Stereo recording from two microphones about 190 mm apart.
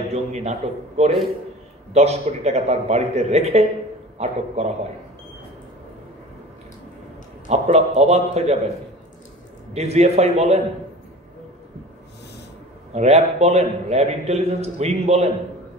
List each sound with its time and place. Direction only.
0.1 s a man's voice: 35° right (ahead or behind)
7.4 s a man's voice: 35° right (ahead or behind)
9.8 s a man's voice: 35° right (ahead or behind)
12.9 s a man's voice: 35° right (ahead or behind)